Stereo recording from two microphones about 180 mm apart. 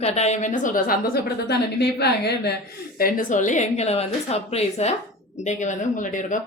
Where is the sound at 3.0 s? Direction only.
50° left (ahead or behind).